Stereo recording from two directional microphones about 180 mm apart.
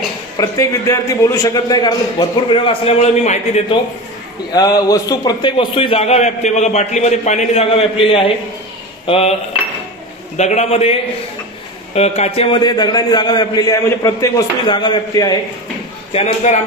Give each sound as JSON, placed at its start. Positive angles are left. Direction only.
{"t": 0.4, "sound": "a man's voice", "side_deg": 20}
{"t": 4.5, "sound": "a man's voice", "side_deg": 20}